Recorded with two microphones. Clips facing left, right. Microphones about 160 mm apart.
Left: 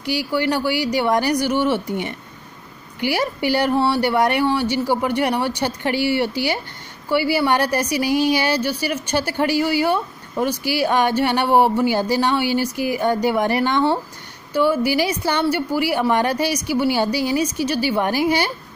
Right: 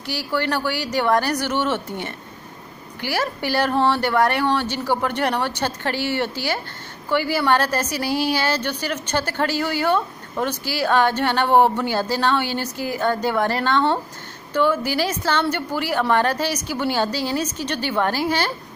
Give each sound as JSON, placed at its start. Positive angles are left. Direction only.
{"t": 0.0, "sound": "a woman's voice", "side_deg": 15}